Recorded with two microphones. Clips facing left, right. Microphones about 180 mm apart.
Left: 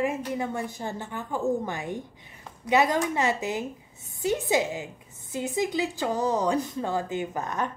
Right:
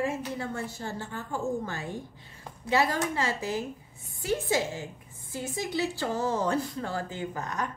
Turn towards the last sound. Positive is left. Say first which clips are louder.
# left 3 dB
turn(degrees=20)  # may be behind; listen again after turning